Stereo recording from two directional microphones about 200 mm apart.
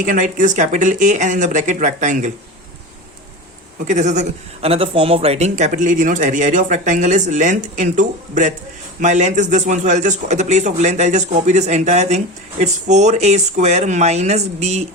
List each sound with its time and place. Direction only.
0.0 s a man's voice: 40° right (ahead or behind)
3.8 s a man's voice: 35° right (ahead or behind)